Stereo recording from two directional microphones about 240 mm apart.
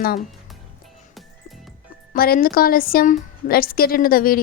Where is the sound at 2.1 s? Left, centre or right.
Left.